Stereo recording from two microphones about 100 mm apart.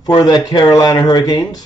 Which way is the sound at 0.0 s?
45° left (ahead or behind).